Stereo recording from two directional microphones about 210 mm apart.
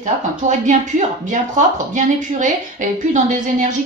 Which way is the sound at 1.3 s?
35° right (ahead or behind).